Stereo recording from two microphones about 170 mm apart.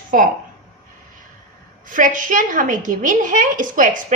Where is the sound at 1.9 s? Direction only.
50° right (ahead or behind).